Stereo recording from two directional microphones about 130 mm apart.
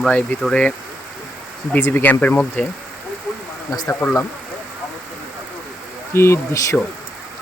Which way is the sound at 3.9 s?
15° left (ahead or behind).